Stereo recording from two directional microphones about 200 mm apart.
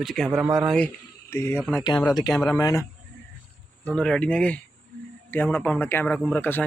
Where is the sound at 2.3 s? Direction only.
Centre (ahead or behind).